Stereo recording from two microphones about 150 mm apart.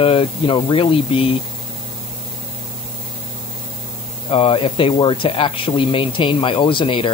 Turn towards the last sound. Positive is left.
turn(degrees=35)  # may be behind; listen again after turning